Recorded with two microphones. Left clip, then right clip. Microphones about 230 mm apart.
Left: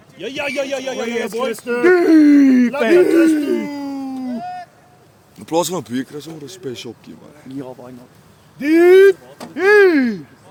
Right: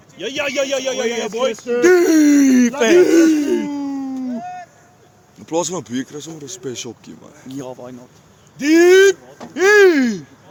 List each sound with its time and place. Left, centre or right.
0.2 s a man's voice: right
1.8 s speech: right
3.7 s a sound: left
4.3 s a sound: left
5.5 s speech: centre
7.4 s speech: right